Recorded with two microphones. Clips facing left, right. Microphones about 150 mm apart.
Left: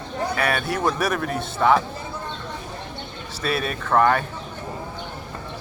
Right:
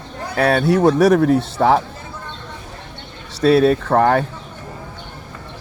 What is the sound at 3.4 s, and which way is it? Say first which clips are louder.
Speech: right 13 dB; 75° right (ahead or behind).